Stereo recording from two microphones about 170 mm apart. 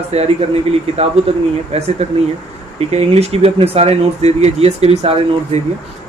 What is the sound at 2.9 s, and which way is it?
Speech, 40° right (ahead or behind).